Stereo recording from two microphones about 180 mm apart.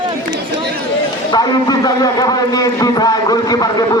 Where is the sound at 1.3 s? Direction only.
20° left (ahead or behind).